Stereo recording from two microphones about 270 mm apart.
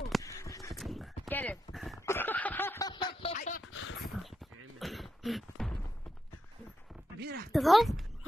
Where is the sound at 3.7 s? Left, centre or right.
Left.